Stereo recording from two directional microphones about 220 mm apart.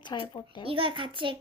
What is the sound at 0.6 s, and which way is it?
Speech, 25° right (ahead or behind).